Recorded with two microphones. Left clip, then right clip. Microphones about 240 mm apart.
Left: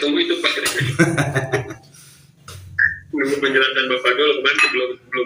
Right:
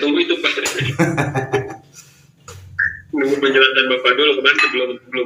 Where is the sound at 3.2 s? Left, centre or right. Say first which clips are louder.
Right 4 dB; centre.